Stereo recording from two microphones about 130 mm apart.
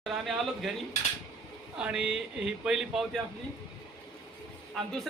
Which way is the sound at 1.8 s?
5° right (ahead or behind).